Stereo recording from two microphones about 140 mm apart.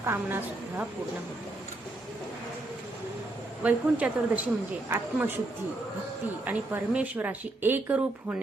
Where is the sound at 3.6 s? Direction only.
10° right (ahead or behind).